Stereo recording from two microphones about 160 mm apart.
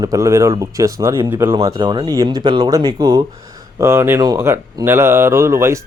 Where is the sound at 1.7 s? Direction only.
30° right (ahead or behind).